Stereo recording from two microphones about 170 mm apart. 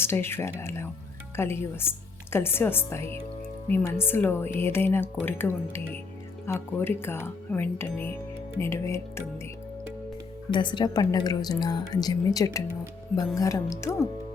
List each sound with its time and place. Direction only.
0.0 s a woman's voice: 15° left (ahead or behind)
10.5 s a woman's voice: 25° left (ahead or behind)